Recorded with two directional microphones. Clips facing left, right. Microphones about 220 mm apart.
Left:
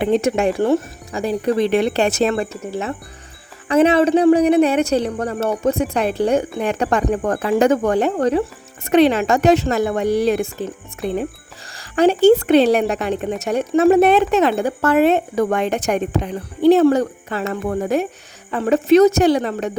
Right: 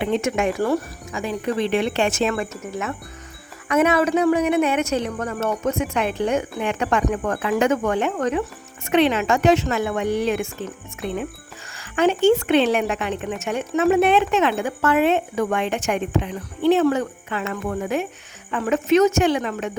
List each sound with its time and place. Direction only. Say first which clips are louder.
0.0 s speech: left 5 dB; 35° left (ahead or behind)
1.2 s speech: left 5 dB; 40° left (ahead or behind)
11.8 s a sound: left 4 dB; 35° left (ahead or behind)
12.2 s speech: left 5 dB; 40° left (ahead or behind)